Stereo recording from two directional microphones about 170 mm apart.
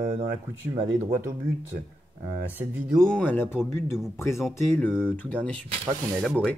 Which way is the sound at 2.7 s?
5° right (ahead or behind).